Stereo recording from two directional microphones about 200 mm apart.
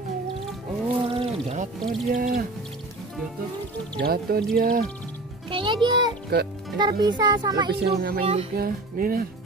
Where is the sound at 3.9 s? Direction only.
50° right (ahead or behind).